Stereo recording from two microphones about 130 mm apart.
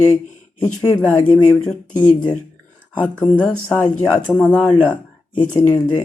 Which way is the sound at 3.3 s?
10° left (ahead or behind).